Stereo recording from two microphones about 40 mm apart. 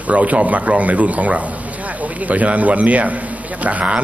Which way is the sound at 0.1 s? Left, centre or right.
Right.